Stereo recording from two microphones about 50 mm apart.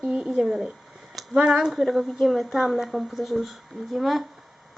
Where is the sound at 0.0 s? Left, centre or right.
Centre.